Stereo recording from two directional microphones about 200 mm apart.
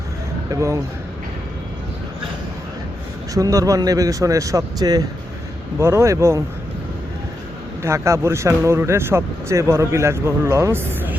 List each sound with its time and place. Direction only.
0.5 s speech: 15° right (ahead or behind)
3.3 s speech: 15° right (ahead or behind)
7.8 s speech: 15° right (ahead or behind)